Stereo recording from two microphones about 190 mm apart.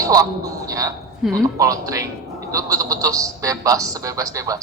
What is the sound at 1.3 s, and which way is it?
A man's voice, 15° right (ahead or behind).